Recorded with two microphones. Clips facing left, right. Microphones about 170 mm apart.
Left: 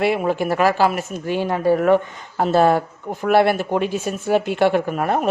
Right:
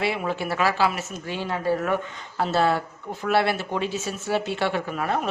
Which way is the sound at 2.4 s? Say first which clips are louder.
Left 6 dB; 50° left (ahead or behind).